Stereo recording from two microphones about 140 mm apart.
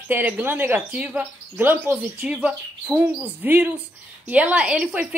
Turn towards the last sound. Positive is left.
turn(degrees=-10)  # may be behind; listen again after turning